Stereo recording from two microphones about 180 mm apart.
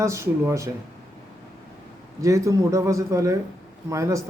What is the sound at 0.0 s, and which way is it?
Speech, 15° right (ahead or behind).